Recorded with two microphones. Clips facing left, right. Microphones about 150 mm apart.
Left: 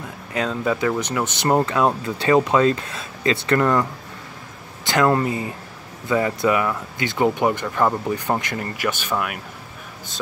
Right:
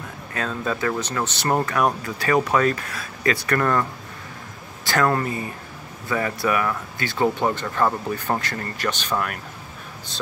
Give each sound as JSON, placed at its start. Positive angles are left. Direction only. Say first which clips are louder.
{"t": 0.3, "sound": "speech", "louder": "left 4 dB", "side_deg": 15}
{"t": 4.8, "sound": "speech", "louder": "left 3 dB", "side_deg": 20}